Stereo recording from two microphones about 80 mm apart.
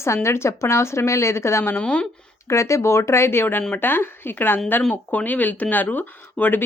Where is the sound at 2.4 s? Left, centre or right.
Left.